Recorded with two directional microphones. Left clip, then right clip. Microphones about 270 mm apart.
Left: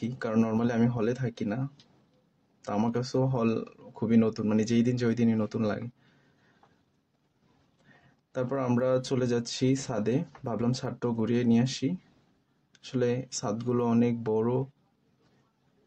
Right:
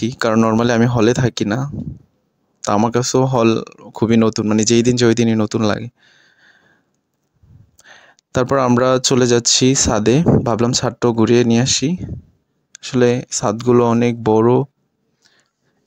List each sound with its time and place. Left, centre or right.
0.0 s speech: right
8.3 s speech: right